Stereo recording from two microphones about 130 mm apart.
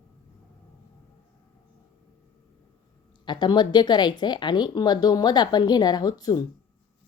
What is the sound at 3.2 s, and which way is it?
A woman's voice, 35° left (ahead or behind).